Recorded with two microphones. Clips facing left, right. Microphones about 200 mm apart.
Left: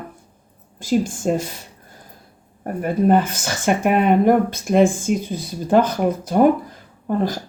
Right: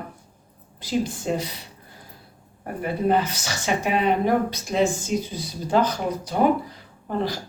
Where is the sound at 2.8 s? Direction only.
50° left (ahead or behind).